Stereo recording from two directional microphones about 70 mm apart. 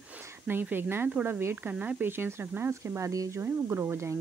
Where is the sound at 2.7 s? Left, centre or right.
Right.